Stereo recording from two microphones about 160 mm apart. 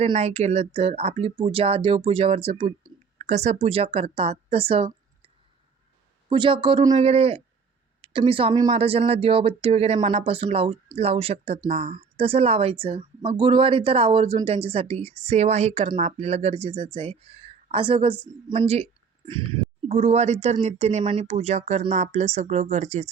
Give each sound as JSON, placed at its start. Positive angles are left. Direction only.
{"t": 0.0, "sound": "speech", "side_deg": -45}
{"t": 6.2, "sound": "a woman's voice", "side_deg": -30}